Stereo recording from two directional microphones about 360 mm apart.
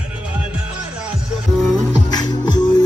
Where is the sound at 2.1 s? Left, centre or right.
Centre.